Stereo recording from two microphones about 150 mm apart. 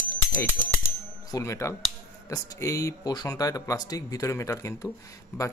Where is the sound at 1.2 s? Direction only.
20° left (ahead or behind).